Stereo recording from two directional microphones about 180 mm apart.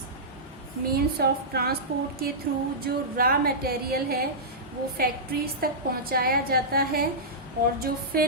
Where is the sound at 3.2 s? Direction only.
55° right (ahead or behind).